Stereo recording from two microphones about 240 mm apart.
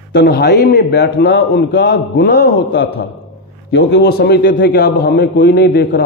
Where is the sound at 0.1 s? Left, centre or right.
Left.